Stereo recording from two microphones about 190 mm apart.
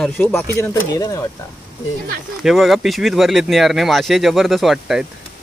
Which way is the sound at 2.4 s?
Centre (ahead or behind).